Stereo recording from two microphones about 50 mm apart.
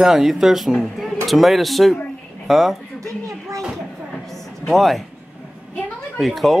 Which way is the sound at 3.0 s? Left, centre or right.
Right.